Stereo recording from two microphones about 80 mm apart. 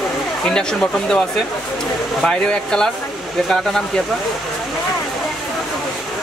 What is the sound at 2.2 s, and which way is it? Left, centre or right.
Speech, centre.